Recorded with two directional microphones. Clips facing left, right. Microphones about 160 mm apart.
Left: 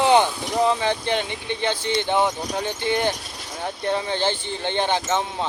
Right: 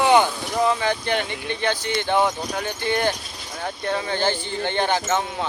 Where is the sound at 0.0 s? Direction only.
25° left (ahead or behind).